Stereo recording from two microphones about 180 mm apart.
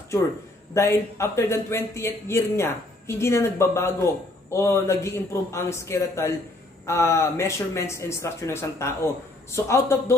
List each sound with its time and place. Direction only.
0.7 s speech: 15° left (ahead or behind)